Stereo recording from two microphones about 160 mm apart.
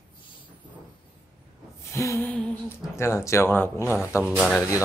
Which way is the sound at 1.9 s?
15° left (ahead or behind).